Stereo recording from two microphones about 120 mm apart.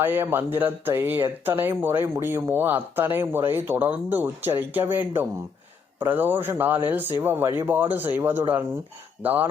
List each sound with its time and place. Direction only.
0.0 s speech: 20° right (ahead or behind)